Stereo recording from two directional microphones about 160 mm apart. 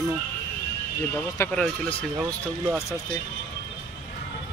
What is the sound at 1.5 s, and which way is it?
Speech, 5° left (ahead or behind).